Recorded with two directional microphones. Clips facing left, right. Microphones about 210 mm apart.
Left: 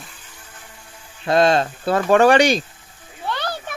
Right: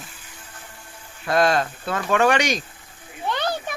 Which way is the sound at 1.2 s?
25° left (ahead or behind).